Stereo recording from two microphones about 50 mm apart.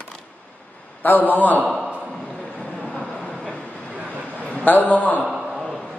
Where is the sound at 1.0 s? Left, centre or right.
Left.